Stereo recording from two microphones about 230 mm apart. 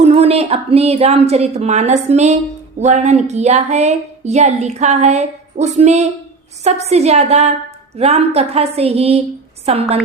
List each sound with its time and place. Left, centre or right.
0.0 s a woman's voice: right